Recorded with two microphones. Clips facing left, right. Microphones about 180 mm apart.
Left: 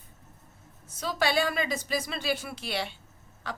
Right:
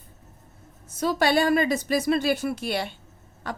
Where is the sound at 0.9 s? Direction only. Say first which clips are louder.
Right 6 dB; 45° right (ahead or behind).